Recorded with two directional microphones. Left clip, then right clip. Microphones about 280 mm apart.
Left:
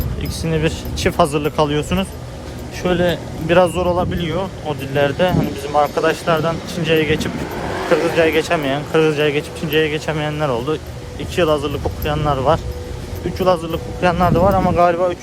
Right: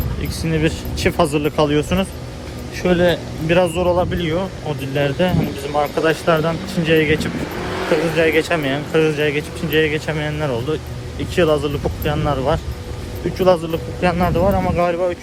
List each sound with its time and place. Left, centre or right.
0.2 s speech: centre
7.7 s a sound: left
8.1 s speech: centre